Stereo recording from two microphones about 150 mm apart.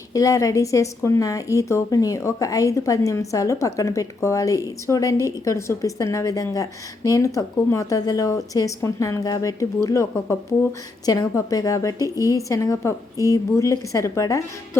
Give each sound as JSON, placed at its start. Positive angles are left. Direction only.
{"t": 0.1, "sound": "a woman's voice", "side_deg": 20}